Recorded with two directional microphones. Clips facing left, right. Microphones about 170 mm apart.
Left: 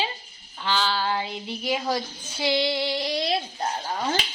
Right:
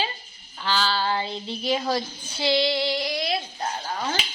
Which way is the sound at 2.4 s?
20° left (ahead or behind).